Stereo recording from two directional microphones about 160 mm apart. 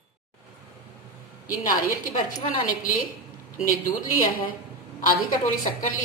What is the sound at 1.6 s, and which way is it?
A woman's voice, 60° left (ahead or behind).